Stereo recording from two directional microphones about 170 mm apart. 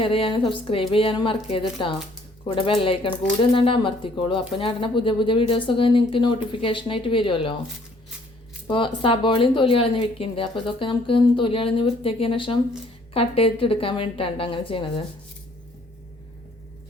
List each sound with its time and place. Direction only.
0.0 s speech: 30° left (ahead or behind)
9.0 s speech: 30° left (ahead or behind)